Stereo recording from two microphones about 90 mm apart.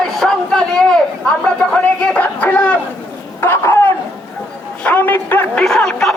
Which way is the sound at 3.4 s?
30° left (ahead or behind).